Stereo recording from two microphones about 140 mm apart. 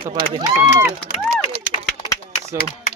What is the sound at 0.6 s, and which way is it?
Speech, 15° right (ahead or behind).